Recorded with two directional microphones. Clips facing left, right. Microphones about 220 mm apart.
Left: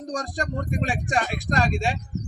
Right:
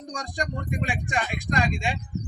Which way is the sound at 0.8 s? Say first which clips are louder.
Left 4 dB; 35° left (ahead or behind).